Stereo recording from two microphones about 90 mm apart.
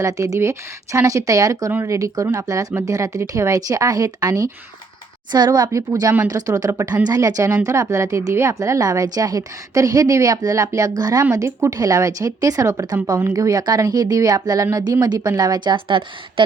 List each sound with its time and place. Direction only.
0.0 s a woman's voice: 35° right (ahead or behind)
5.3 s a woman's voice: 50° right (ahead or behind); by 16.0 s 65° right (ahead or behind)